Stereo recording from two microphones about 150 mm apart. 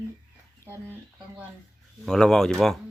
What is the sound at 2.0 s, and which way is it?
Speech, 5° left (ahead or behind).